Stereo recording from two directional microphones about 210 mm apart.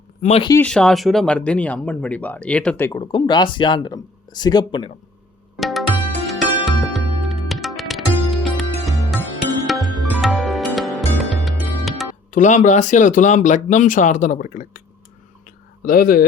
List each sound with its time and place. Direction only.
0.2 s speech: 30° left (ahead or behind)
0.6 s speech: 5° left (ahead or behind)
3.0 s speech: 20° left (ahead or behind)
5.5 s music: centre (ahead or behind)
12.3 s speech: 35° left (ahead or behind)
15.4 s a sound: 45° left (ahead or behind)